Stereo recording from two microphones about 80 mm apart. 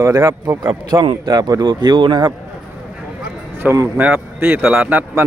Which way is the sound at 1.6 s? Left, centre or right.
Right.